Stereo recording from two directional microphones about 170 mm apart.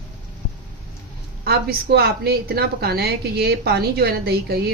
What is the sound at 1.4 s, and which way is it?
A woman's voice, 65° right (ahead or behind).